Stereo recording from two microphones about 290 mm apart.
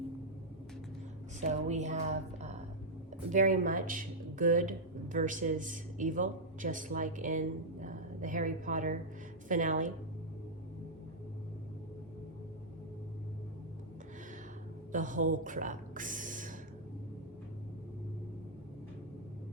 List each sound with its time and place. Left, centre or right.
1.4 s a woman's voice: right
3.3 s a woman's voice: right
14.9 s speech: right